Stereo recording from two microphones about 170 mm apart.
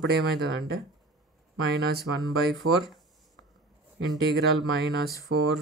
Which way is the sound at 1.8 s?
70° right (ahead or behind).